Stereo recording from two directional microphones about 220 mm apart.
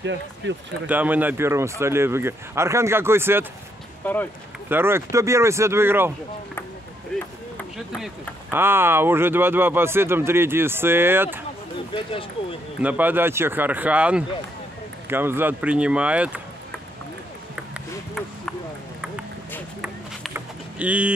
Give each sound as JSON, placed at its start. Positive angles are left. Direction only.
{"t": 0.0, "sound": "speech", "side_deg": -55}
{"t": 0.8, "sound": "speech", "side_deg": -5}
{"t": 4.0, "sound": "speech", "side_deg": 10}
{"t": 4.6, "sound": "speech", "side_deg": -10}
{"t": 7.1, "sound": "ping", "side_deg": 5}
{"t": 7.5, "sound": "speech", "side_deg": 0}
{"t": 11.9, "sound": "speech", "side_deg": 25}
{"t": 12.8, "sound": "speech", "side_deg": -10}
{"t": 17.7, "sound": "ping", "side_deg": 0}
{"t": 19.8, "sound": "vehicle", "side_deg": -5}